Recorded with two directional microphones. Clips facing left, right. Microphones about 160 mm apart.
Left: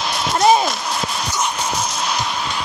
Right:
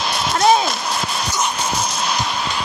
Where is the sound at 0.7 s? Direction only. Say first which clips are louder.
Even; 30° right (ahead or behind).